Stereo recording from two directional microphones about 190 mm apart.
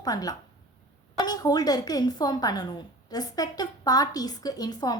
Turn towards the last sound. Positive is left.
turn(degrees=20)  # may be behind; listen again after turning